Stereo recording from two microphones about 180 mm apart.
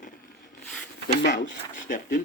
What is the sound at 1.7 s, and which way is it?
Speech, 45° left (ahead or behind).